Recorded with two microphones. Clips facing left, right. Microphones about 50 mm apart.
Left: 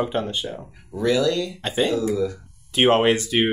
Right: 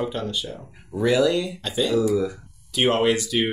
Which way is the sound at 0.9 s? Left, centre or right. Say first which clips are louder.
Right 1 dB; centre.